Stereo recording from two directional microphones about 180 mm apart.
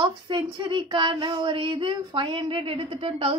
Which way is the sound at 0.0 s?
25° right (ahead or behind).